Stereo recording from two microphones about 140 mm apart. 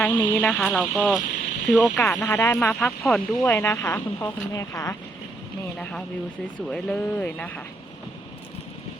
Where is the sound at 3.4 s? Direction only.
20° left (ahead or behind).